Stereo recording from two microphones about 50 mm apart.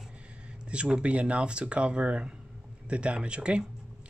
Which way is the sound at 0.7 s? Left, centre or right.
Centre.